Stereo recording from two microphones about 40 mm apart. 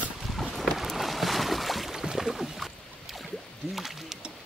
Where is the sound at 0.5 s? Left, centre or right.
Centre.